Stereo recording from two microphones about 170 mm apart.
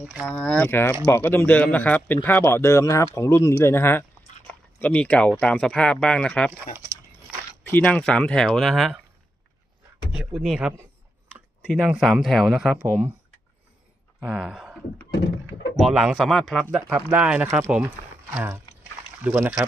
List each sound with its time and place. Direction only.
0.0 s speech: 5° right (ahead or behind)
0.3 s speech: 5° left (ahead or behind)
10.1 s speech: 5° right (ahead or behind)
11.9 s speech: centre (ahead or behind)
14.3 s speech: 5° right (ahead or behind)
15.8 s speech: centre (ahead or behind)